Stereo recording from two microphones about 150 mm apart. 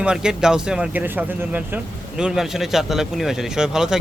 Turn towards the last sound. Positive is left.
turn(degrees=-5)  # may be behind; listen again after turning